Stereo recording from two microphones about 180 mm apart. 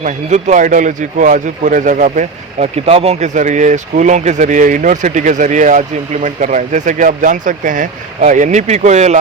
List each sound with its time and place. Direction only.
0.0 s a man's voice: 40° right (ahead or behind)